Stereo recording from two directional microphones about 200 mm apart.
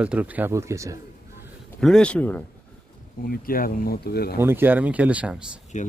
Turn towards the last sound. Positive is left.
turn(degrees=35)  # may be behind; listen again after turning